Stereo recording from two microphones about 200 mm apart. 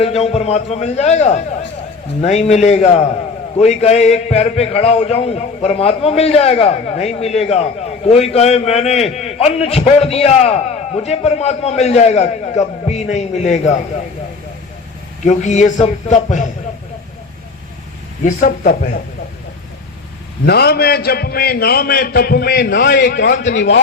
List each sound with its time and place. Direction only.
0.0 s a man's voice: 30° left (ahead or behind)
15.2 s a man's voice: 35° left (ahead or behind)
18.3 s a man's voice: 40° left (ahead or behind)
20.5 s a man's voice: 50° left (ahead or behind)